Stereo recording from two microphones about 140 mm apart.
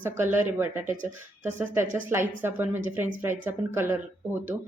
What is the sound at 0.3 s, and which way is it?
A woman's voice, 15° right (ahead or behind).